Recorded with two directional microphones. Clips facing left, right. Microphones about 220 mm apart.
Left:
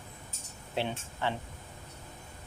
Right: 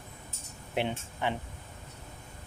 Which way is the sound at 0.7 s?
15° right (ahead or behind).